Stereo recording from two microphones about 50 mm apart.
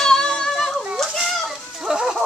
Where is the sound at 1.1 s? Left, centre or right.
Centre.